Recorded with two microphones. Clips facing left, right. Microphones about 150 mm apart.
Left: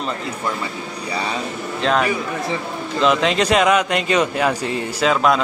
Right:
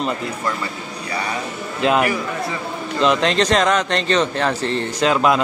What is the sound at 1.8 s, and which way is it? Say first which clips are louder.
A man's voice: right 1 dB; 10° right (ahead or behind).